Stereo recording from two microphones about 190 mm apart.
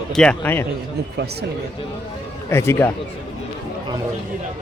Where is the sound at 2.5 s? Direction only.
15° left (ahead or behind).